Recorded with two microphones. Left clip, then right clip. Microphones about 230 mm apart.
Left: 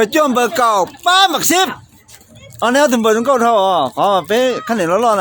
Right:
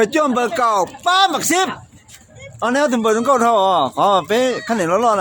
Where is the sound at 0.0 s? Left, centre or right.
Centre.